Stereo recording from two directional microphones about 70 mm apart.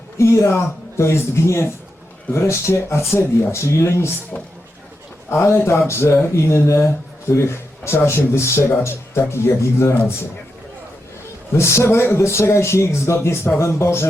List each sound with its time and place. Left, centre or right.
0.2 s speech: left
5.3 s speech: left
11.5 s speech: left